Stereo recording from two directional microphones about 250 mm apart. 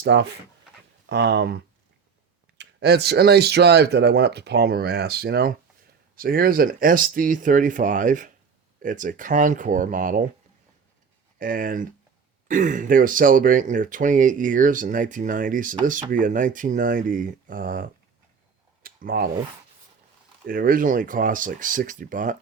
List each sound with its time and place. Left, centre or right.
0.0 s speech: right
11.3 s speech: right
18.8 s a sound: right
20.5 s speech: right